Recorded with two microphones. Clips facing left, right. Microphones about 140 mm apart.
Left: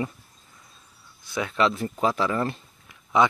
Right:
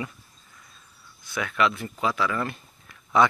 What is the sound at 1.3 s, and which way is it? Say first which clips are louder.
Speech: left 1 dB; 25° left (ahead or behind).